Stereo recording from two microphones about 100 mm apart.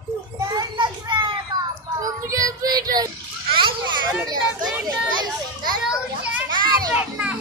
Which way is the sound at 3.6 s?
55° right (ahead or behind).